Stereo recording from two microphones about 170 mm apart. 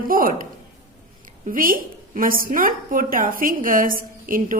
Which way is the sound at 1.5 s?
55° right (ahead or behind).